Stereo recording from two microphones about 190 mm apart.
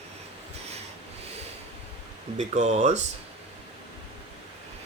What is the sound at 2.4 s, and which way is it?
Speech, 35° right (ahead or behind).